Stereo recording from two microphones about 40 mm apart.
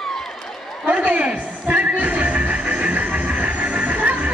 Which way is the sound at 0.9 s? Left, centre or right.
Right.